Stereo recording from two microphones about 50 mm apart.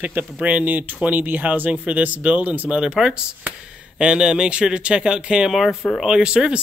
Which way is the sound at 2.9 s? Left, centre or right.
Centre.